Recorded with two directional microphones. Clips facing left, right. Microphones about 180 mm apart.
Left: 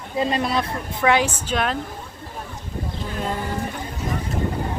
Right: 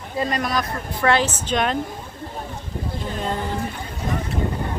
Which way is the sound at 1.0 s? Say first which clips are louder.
Even; 10° left (ahead or behind).